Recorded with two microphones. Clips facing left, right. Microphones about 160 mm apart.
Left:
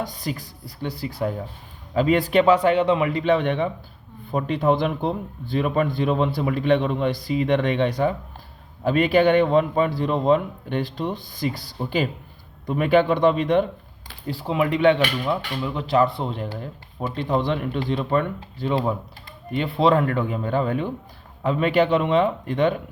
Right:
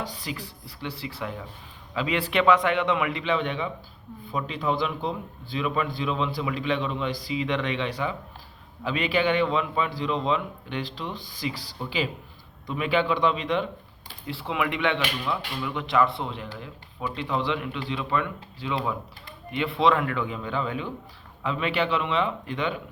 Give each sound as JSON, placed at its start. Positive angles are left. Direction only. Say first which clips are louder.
{"t": 0.0, "sound": "a man's voice", "louder": "left 5 dB", "side_deg": 45}